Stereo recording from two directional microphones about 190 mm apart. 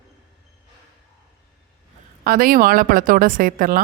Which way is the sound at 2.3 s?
50° right (ahead or behind).